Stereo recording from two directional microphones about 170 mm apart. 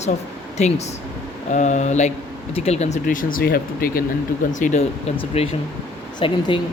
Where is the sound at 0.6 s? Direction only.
40° left (ahead or behind); by 4.0 s 60° left (ahead or behind).